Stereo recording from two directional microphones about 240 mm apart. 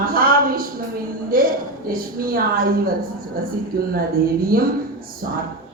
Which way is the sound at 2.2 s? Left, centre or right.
Right.